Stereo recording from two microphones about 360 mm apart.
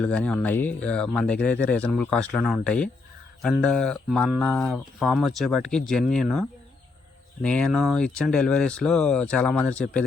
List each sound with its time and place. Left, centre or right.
0.0 s speech: centre
7.4 s speech: centre